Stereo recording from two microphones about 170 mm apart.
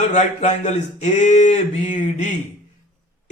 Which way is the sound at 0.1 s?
45° left (ahead or behind).